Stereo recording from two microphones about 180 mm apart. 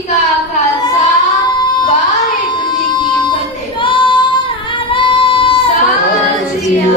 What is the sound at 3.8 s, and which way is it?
Child singing, 25° left (ahead or behind).